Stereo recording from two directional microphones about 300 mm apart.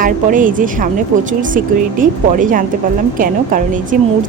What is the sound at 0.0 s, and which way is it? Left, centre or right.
A woman's voice, right.